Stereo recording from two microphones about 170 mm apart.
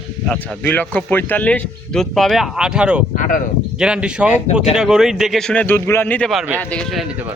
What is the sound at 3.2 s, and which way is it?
Speech, 50° left (ahead or behind).